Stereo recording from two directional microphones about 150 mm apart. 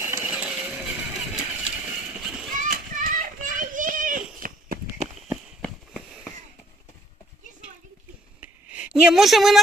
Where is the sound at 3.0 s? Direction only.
60° right (ahead or behind).